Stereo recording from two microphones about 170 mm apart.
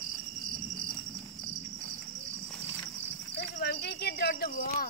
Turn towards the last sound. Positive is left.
turn(degrees=65)  # may be behind; listen again after turning